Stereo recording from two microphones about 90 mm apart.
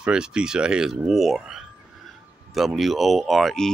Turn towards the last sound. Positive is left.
turn(degrees=0)  # may be behind; listen again after turning